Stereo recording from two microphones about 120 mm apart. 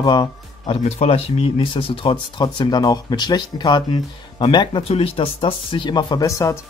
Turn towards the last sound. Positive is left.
turn(degrees=25)  # may be behind; listen again after turning